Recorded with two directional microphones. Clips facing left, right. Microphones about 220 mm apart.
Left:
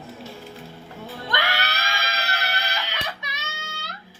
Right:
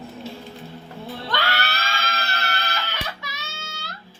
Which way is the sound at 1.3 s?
15° left (ahead or behind).